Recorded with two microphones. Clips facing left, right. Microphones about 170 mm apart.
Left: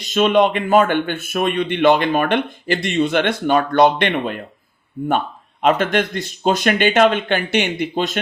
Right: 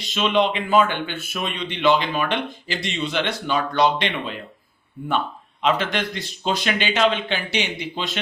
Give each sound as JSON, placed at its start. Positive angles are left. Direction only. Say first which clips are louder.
{"t": 0.0, "sound": "speech", "louder": "left 6 dB", "side_deg": 45}
{"t": 5.6, "sound": "speech", "louder": "left 5 dB", "side_deg": 50}